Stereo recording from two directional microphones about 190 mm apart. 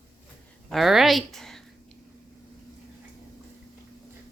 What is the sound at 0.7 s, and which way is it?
Speech, centre (ahead or behind).